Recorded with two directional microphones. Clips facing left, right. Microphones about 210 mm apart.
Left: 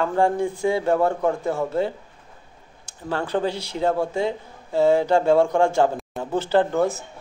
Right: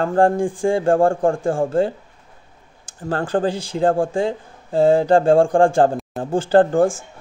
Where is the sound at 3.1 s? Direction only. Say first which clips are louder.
Right 4 dB; 50° right (ahead or behind).